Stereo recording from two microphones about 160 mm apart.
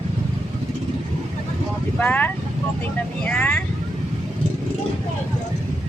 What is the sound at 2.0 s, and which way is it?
Speech, 10° left (ahead or behind).